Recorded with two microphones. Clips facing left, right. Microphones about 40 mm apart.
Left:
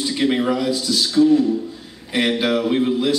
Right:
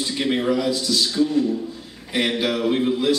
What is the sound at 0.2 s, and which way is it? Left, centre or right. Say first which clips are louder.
A man's voice: left 2 dB; centre.